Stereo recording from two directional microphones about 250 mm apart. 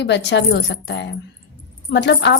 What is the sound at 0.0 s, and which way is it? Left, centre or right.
A woman's voice, left.